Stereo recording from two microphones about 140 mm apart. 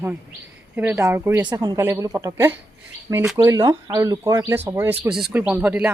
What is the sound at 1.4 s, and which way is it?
Speech, 25° right (ahead or behind).